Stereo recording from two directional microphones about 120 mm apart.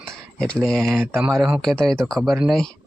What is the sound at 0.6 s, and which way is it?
Speech, 5° left (ahead or behind).